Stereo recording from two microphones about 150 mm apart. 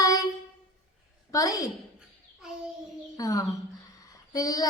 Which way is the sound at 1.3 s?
25° left (ahead or behind).